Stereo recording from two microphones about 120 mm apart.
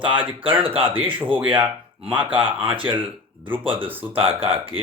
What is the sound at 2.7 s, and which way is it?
Speech, 45° right (ahead or behind).